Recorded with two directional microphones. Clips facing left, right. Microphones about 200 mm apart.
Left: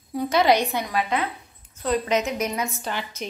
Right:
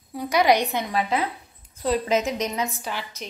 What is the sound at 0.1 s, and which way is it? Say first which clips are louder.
Speech: even; 10° right (ahead or behind).